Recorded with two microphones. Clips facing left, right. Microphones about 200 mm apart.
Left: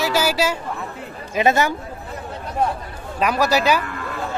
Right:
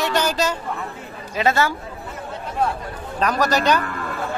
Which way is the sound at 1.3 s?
20° left (ahead or behind).